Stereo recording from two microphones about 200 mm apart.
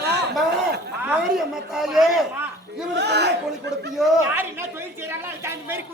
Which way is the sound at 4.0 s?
10° right (ahead or behind).